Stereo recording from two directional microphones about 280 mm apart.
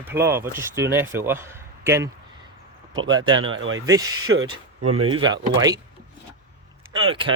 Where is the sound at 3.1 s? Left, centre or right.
Centre.